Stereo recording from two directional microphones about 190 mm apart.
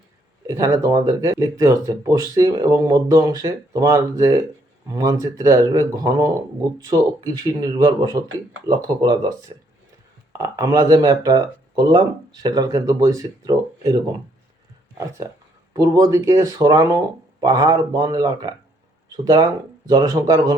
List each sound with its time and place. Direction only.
0.4 s speech: 20° right (ahead or behind)
15.7 s speech: 20° right (ahead or behind)